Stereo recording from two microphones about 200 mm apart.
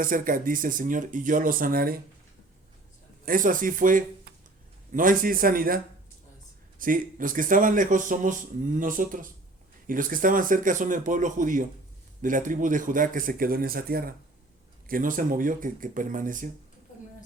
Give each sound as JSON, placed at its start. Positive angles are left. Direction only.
{"t": 0.0, "sound": "speech", "side_deg": -45}
{"t": 3.2, "sound": "a man's voice", "side_deg": -45}